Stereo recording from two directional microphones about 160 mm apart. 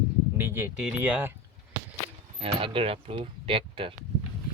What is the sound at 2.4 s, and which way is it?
Speech, 35° right (ahead or behind).